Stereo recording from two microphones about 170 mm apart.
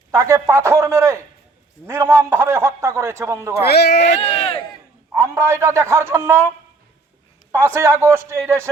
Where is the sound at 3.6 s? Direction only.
70° left (ahead or behind).